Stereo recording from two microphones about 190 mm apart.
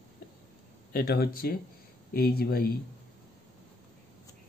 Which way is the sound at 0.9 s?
50° left (ahead or behind).